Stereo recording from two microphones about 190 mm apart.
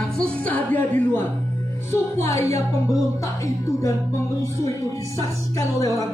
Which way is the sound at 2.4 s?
15° left (ahead or behind).